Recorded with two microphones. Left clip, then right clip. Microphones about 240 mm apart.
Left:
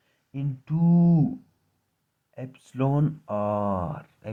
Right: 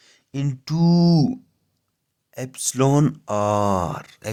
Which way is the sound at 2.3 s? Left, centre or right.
Right.